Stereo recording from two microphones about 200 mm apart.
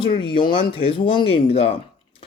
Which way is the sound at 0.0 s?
25° left (ahead or behind).